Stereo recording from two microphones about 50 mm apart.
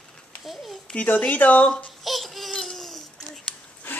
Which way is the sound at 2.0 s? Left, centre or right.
Centre.